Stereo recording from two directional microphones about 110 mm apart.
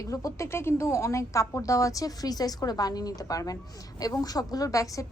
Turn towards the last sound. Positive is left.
turn(degrees=30)  # may be behind; listen again after turning